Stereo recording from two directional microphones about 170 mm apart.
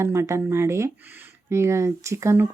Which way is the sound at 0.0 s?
15° right (ahead or behind).